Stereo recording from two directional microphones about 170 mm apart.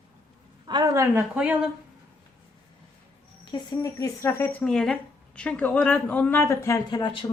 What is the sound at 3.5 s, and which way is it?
Speech, 20° left (ahead or behind).